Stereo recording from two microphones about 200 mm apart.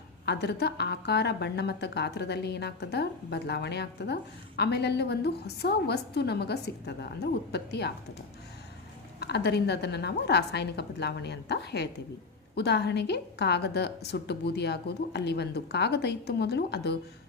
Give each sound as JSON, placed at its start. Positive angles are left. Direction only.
{"t": 0.3, "sound": "a woman's voice", "side_deg": 55}
{"t": 9.2, "sound": "a woman's voice", "side_deg": 55}